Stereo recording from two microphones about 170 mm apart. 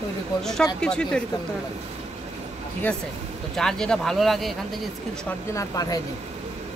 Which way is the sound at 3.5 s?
5° left (ahead or behind).